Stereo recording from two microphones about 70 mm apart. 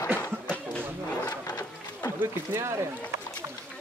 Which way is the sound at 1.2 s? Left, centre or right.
Left.